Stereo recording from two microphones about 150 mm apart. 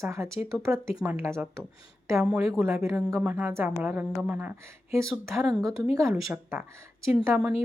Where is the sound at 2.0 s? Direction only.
20° right (ahead or behind).